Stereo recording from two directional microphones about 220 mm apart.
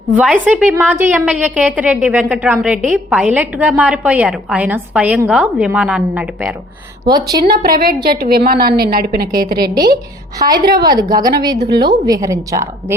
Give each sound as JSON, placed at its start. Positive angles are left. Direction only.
{"t": 0.2, "sound": "a woman's voice", "side_deg": -5}
{"t": 7.6, "sound": "a woman's voice", "side_deg": -40}
{"t": 10.3, "sound": "a woman's voice", "side_deg": -15}